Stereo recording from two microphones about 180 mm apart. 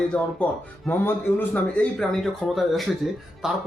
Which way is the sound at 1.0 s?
10° left (ahead or behind).